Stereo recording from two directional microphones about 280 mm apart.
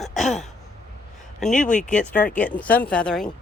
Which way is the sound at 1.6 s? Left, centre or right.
Left.